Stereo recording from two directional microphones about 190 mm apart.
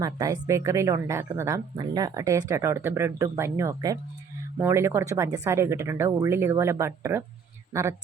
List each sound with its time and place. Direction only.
0.0 s a woman's voice: 20° right (ahead or behind)